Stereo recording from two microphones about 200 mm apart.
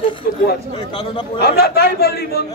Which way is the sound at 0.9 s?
25° left (ahead or behind).